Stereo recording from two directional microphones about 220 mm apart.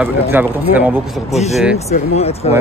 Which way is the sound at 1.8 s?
30° left (ahead or behind).